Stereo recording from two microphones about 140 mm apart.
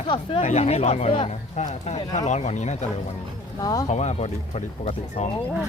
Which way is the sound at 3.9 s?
50° left (ahead or behind).